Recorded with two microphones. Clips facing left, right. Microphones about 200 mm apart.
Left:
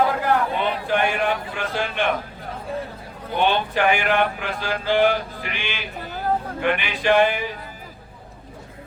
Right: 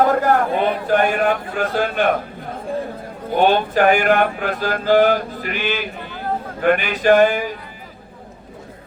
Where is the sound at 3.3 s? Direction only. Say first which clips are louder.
Right 5 dB; 45° right (ahead or behind).